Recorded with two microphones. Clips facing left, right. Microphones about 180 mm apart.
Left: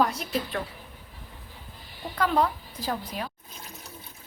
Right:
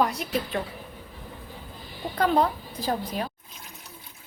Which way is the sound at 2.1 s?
35° right (ahead or behind).